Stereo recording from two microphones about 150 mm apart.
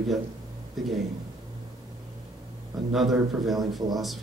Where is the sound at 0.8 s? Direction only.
Centre (ahead or behind).